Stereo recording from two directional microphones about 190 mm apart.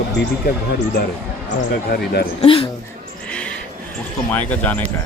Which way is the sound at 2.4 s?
30° left (ahead or behind).